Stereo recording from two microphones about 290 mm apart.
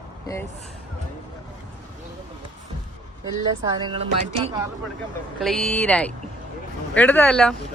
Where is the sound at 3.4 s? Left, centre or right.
Centre.